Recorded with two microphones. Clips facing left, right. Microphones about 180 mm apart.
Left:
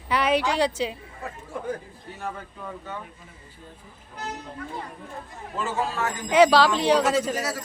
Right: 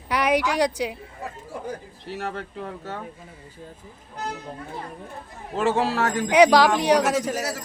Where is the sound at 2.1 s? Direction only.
75° right (ahead or behind).